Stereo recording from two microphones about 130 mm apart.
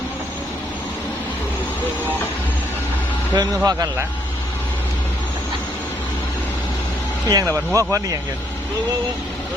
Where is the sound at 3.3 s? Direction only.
25° right (ahead or behind).